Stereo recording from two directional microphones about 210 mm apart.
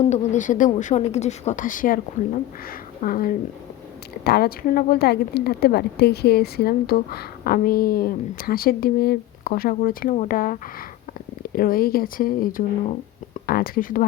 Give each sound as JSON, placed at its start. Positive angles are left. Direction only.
{"t": 0.0, "sound": "speech", "side_deg": 35}